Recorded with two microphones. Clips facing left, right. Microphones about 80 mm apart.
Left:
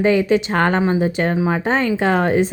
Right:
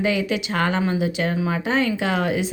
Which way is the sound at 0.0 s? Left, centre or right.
Left.